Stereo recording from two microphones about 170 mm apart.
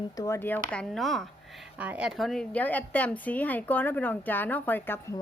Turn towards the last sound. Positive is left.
turn(degrees=10)  # may be behind; listen again after turning